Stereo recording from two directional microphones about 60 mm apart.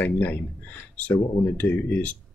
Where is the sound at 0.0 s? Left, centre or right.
Left.